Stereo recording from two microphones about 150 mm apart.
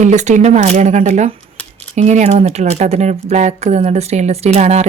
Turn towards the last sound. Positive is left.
turn(degrees=-45)  # may be behind; listen again after turning